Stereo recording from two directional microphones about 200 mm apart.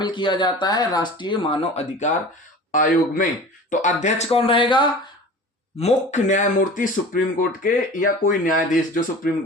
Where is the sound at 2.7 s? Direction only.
40° left (ahead or behind).